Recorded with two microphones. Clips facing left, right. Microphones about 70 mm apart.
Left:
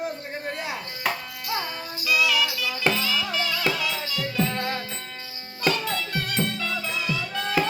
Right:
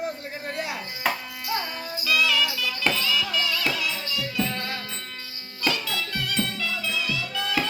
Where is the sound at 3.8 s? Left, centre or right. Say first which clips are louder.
Left 1 dB; left.